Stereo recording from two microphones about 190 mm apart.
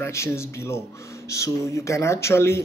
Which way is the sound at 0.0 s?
15° left (ahead or behind).